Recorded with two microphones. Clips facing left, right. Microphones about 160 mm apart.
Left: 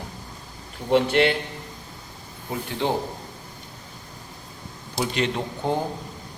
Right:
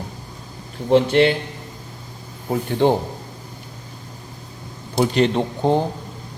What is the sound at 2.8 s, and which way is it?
Speech, 50° right (ahead or behind).